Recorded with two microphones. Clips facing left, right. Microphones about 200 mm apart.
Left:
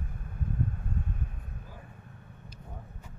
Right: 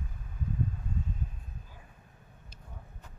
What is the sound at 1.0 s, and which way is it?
Vehicle, 60° left (ahead or behind).